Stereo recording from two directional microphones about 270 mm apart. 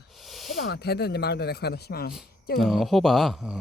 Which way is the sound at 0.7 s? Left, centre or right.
Left.